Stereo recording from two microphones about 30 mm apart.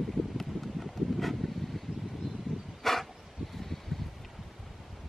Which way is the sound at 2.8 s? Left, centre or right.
Centre.